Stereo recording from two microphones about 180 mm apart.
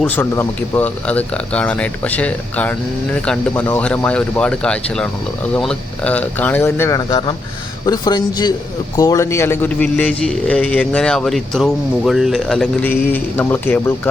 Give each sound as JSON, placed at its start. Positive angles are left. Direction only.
{"t": 0.0, "sound": "a man's voice", "side_deg": 10}